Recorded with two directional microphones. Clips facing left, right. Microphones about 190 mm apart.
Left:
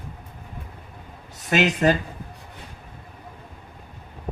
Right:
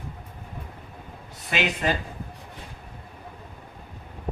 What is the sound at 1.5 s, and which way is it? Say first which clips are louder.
Speech: left 7 dB; 45° left (ahead or behind).